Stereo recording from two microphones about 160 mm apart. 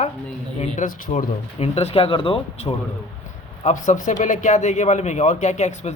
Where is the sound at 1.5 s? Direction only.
40° left (ahead or behind).